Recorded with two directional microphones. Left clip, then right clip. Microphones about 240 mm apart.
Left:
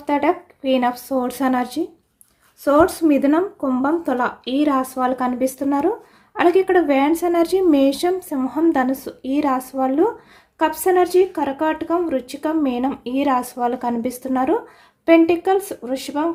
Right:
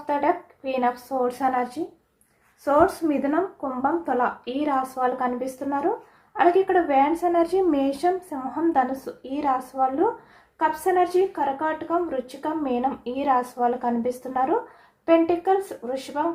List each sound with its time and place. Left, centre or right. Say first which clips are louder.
0.1 s speech: left 4 dB; left
2.6 s speech: left 5 dB; left